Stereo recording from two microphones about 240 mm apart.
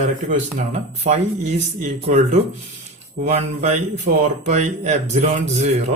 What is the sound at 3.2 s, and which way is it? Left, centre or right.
Speech, right.